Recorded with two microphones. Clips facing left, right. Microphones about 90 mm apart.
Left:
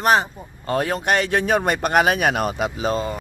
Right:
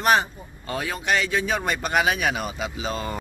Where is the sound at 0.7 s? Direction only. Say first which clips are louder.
Left 5 dB; 50° left (ahead or behind).